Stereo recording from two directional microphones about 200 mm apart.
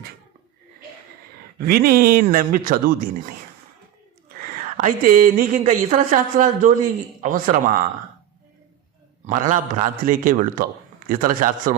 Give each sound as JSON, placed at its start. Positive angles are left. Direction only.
{"t": 1.5, "sound": "speech", "side_deg": -50}
{"t": 4.4, "sound": "speech", "side_deg": -45}
{"t": 9.2, "sound": "speech", "side_deg": -40}